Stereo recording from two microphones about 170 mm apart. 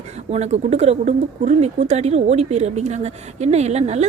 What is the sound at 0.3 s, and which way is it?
Speech, 40° right (ahead or behind).